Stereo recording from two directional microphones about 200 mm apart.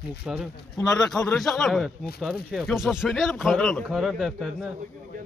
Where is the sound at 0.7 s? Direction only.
20° left (ahead or behind).